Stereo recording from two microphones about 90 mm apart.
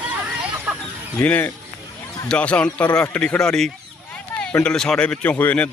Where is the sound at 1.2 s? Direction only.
15° left (ahead or behind).